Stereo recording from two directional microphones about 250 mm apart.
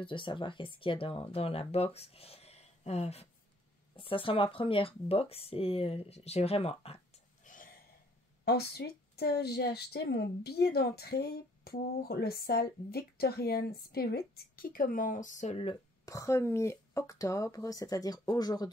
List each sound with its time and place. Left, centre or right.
0.0 s speech: centre
7.4 s a sound: left
8.5 s a woman's voice: left
16.1 s speech: centre